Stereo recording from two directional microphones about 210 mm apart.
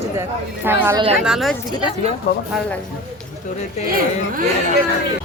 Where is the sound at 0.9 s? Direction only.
25° right (ahead or behind).